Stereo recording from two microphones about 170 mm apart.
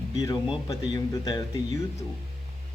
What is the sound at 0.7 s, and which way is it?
Speech, 20° left (ahead or behind).